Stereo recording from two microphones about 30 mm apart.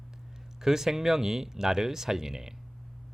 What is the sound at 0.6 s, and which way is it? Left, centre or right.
Speech, centre.